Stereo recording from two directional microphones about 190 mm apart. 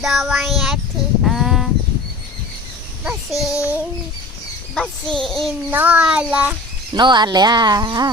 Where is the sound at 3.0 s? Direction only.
5° right (ahead or behind).